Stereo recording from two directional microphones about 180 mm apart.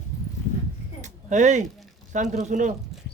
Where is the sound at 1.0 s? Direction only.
40° right (ahead or behind).